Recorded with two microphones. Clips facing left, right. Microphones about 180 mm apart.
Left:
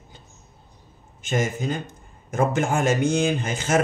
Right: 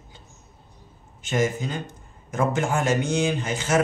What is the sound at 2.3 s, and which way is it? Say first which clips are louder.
Speech: left 2 dB; 50° left (ahead or behind).